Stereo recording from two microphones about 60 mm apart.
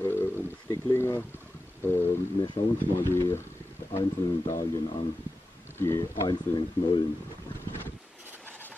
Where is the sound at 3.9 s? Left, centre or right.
Left.